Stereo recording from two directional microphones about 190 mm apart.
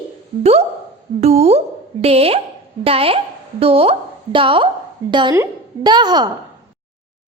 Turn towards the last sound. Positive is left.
turn(degrees=-20)  # may be behind; listen again after turning